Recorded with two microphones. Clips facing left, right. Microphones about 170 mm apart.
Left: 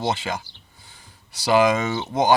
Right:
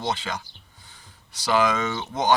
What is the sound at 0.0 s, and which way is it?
Speech, 10° left (ahead or behind).